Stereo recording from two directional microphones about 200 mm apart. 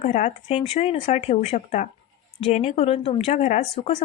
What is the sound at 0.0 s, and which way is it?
A woman's voice, 35° left (ahead or behind).